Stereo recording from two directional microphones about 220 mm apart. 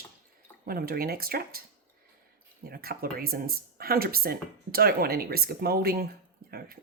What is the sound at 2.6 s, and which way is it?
Speech, 45° right (ahead or behind).